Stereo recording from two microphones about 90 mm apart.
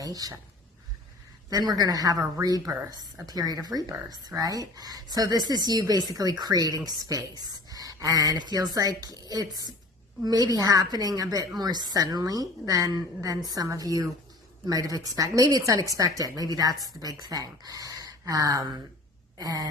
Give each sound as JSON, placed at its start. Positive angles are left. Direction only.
{"t": 0.0, "sound": "speech", "side_deg": -40}
{"t": 1.5, "sound": "speech", "side_deg": -45}